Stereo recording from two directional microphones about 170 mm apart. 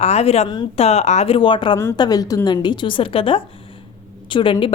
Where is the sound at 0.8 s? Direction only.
40° left (ahead or behind).